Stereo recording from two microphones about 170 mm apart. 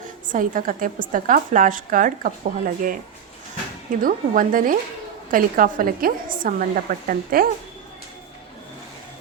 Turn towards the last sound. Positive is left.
turn(degrees=-60)  # may be behind; listen again after turning